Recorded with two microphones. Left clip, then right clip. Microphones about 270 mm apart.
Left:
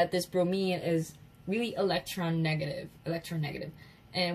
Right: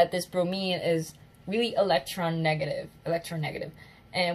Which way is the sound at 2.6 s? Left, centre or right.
Right.